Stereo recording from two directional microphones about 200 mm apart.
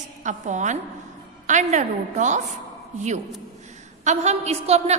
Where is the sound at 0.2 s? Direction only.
40° right (ahead or behind).